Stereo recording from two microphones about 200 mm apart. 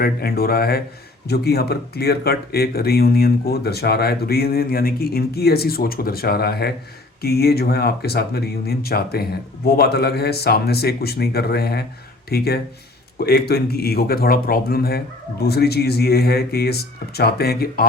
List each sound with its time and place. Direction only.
0.0 s speech: 50° left (ahead or behind)